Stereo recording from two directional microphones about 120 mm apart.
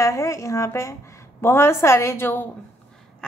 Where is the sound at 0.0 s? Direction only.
25° left (ahead or behind).